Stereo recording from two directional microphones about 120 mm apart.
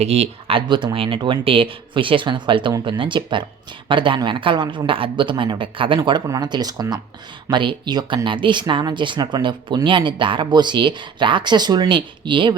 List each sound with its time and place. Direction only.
0.0 s a man's voice: 60° right (ahead or behind); by 12.5 s 40° right (ahead or behind)